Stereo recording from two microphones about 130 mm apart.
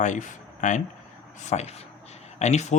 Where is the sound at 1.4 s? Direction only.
60° left (ahead or behind).